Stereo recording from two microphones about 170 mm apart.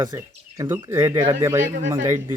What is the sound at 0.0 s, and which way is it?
Speech, 20° right (ahead or behind).